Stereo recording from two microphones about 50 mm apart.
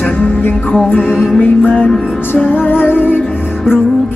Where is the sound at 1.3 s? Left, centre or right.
Left.